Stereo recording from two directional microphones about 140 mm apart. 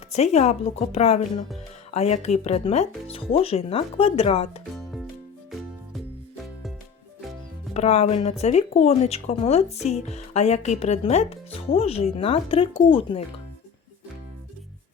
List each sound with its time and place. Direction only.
0.1 s speech: 50° left (ahead or behind)
5.5 s music: centre (ahead or behind)
7.7 s speech: 50° left (ahead or behind)